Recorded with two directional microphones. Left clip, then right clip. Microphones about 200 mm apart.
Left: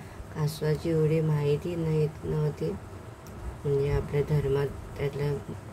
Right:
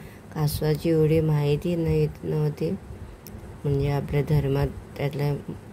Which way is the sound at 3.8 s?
40° right (ahead or behind).